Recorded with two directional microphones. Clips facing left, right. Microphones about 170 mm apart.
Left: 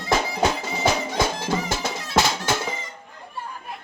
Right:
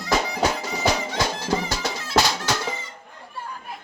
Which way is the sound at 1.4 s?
25° left (ahead or behind).